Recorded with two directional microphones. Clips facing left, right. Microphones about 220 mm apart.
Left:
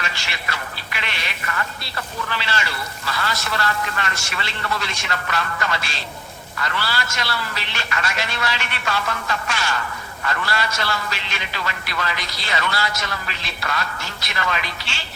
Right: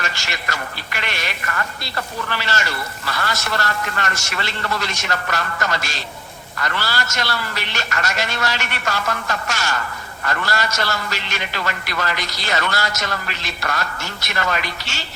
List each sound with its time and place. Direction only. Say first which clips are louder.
0.0 s speech: right 3 dB; 45° right (ahead or behind)